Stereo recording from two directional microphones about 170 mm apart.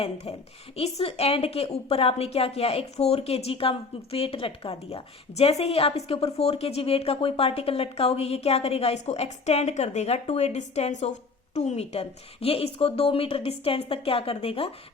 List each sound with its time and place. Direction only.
0.3 s a woman's voice: 35° left (ahead or behind)